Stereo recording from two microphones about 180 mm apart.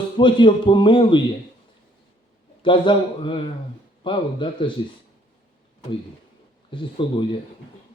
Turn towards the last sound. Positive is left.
turn(degrees=25)  # may be behind; listen again after turning